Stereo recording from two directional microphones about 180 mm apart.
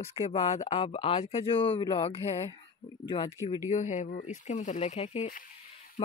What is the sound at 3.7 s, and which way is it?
Speech, 40° left (ahead or behind).